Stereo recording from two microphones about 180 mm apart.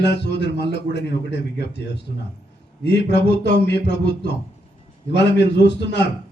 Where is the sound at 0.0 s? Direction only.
70° left (ahead or behind).